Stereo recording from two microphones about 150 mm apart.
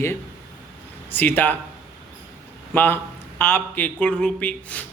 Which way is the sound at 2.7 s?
15° left (ahead or behind).